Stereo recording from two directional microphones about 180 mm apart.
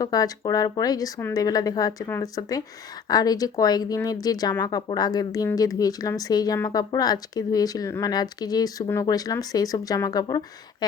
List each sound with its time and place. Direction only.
0.0 s speech: 20° left (ahead or behind)